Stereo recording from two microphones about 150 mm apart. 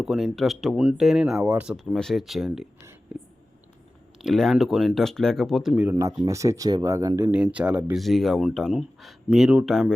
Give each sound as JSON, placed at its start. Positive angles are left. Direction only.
{"t": 0.0, "sound": "speech", "side_deg": -5}
{"t": 5.9, "sound": "speech", "side_deg": -20}
{"t": 7.3, "sound": "speech", "side_deg": -10}